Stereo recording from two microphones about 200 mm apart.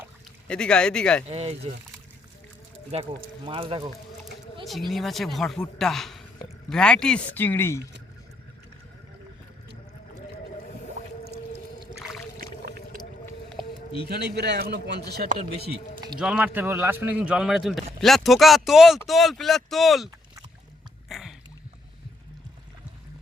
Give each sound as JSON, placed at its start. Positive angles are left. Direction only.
{"t": 0.4, "sound": "a man's voice", "side_deg": 5}
{"t": 1.3, "sound": "speech", "side_deg": -30}
{"t": 2.9, "sound": "speech", "side_deg": -25}
{"t": 4.6, "sound": "a man's voice", "side_deg": 0}
{"t": 12.4, "sound": "a sound", "side_deg": -45}
{"t": 14.1, "sound": "speech", "side_deg": -55}
{"t": 16.1, "sound": "a man's voice", "side_deg": -5}
{"t": 21.1, "sound": "a sound", "side_deg": 0}